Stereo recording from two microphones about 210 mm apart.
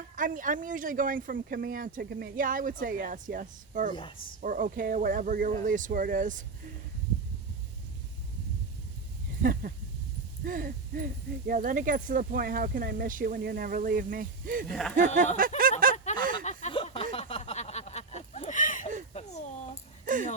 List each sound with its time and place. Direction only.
0.2 s speech: 40° right (ahead or behind)
9.4 s speech: 40° right (ahead or behind)
14.7 s speech: centre (ahead or behind)
14.9 s speech: 35° right (ahead or behind)
16.1 s a sound: 40° right (ahead or behind)
16.4 s a sound: 35° left (ahead or behind)